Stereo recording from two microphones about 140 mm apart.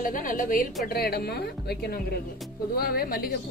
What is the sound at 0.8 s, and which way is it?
Speech, 90° left.